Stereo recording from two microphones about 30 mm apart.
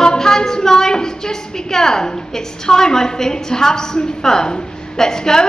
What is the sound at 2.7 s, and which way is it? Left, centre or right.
A woman's voice, centre.